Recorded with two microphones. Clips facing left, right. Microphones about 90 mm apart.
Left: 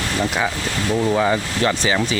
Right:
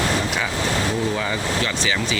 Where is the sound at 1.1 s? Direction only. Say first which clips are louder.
Left 7 dB; 25° left (ahead or behind).